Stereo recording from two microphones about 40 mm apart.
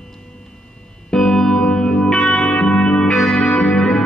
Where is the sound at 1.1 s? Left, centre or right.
Centre.